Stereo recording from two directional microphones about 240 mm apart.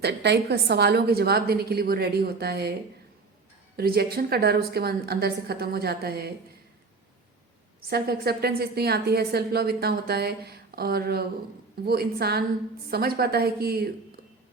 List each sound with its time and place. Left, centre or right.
0.0 s a woman's voice: right
3.8 s a woman's voice: right
7.9 s a woman's voice: right